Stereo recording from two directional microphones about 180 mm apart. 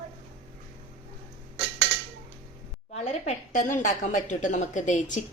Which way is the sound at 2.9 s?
40° left (ahead or behind).